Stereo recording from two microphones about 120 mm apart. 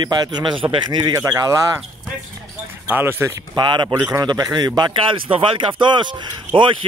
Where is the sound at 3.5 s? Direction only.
40° right (ahead or behind).